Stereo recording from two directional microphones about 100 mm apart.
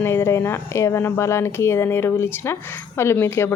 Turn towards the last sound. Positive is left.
turn(degrees=25)  # may be behind; listen again after turning